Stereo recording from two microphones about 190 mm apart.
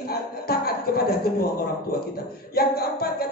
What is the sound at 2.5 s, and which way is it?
Speech, 55° left (ahead or behind).